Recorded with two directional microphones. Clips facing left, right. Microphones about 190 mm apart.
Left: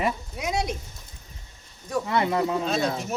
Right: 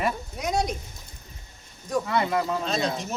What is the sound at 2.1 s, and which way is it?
Speech, 25° left (ahead or behind).